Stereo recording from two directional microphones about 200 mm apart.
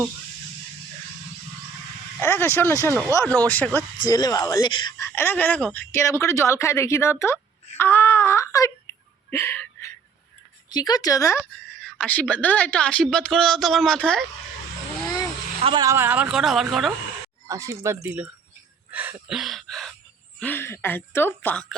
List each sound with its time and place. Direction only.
2.2 s speech: 10° left (ahead or behind)
4.0 s speech: 20° left (ahead or behind)
9.3 s a sound: 10° left (ahead or behind)
10.7 s a woman's voice: 20° left (ahead or behind)
15.6 s speech: 20° right (ahead or behind); by 16.9 s centre (ahead or behind)
17.5 s speech: 15° right (ahead or behind)
18.9 s a sound: 10° right (ahead or behind)
20.4 s speech: 10° left (ahead or behind)